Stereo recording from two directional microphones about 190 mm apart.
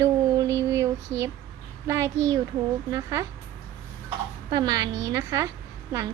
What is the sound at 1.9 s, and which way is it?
Speech, 15° right (ahead or behind).